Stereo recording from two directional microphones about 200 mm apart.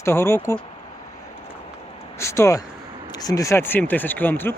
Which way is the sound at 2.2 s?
15° left (ahead or behind).